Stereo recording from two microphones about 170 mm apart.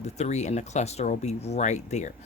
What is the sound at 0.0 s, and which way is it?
Speech, 40° left (ahead or behind).